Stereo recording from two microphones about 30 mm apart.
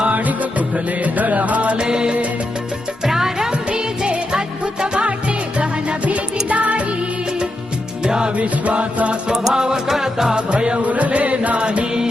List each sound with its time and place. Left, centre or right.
0.1 s music: right
1.8 s music: right
3.0 s music: centre
3.7 s music: right
6.1 s music: right
8.0 s music: right
8.4 s music: right
9.3 s music: right
10.8 s music: right